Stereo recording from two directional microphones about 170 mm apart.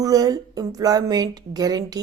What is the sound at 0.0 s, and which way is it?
A woman's voice, 20° right (ahead or behind).